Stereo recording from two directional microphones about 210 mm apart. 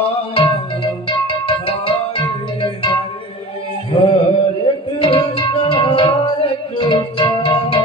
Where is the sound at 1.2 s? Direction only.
25° left (ahead or behind).